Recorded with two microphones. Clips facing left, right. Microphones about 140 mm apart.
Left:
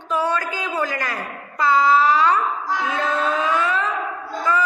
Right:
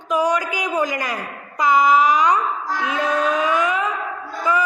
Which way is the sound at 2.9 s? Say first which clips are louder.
Right 3 dB; 15° right (ahead or behind).